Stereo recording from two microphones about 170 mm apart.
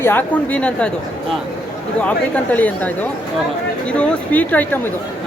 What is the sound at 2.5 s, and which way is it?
Speech, 10° left (ahead or behind).